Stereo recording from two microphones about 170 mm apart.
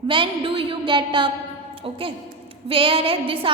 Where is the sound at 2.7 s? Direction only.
30° right (ahead or behind).